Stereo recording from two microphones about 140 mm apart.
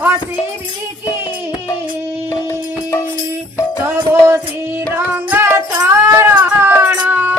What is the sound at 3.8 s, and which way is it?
Music, 20° right (ahead or behind).